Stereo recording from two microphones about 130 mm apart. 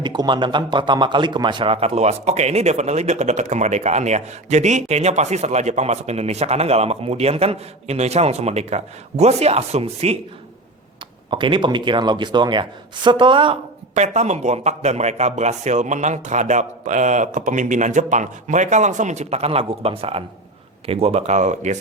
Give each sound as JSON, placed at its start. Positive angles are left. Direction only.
{"t": 0.0, "sound": "speech", "side_deg": -35}
{"t": 11.3, "sound": "speech", "side_deg": -40}
{"t": 13.9, "sound": "speech", "side_deg": -60}